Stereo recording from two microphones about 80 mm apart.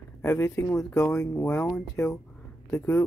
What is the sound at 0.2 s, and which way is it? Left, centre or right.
Speech, left.